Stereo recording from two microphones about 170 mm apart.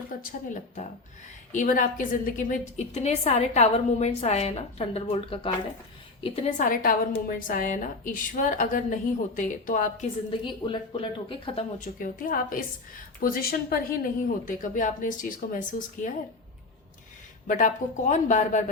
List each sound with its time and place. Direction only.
0.2 s a woman's voice: 50° left (ahead or behind)
6.6 s a woman's voice: 55° left (ahead or behind)
10.4 s a woman's voice: 30° left (ahead or behind)
11.9 s a woman's voice: 55° left (ahead or behind)
17.4 s a woman's voice: 50° left (ahead or behind)